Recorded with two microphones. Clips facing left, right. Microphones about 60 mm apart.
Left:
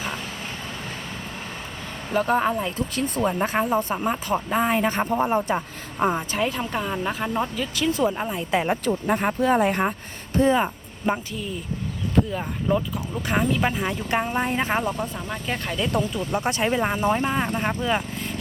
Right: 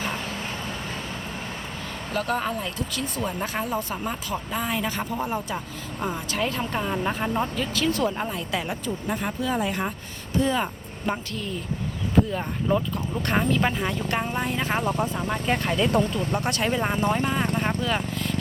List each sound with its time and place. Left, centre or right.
2.1 s speech: centre
2.9 s speech: left
6.3 s speech: centre
8.4 s speech: left
8.8 s speech: left
10.3 s speech: left
10.6 s speech: centre
12.3 s speech: centre
14.4 s speech: left
14.7 s speech: centre
16.4 s speech: centre
17.8 s vehicle: centre